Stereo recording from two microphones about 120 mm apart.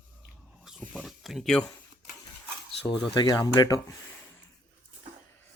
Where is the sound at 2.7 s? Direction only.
50° left (ahead or behind).